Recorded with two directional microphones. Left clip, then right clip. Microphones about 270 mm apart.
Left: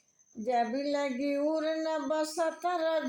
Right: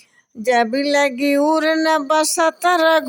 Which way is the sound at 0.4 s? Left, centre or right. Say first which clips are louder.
Right 13 dB; right.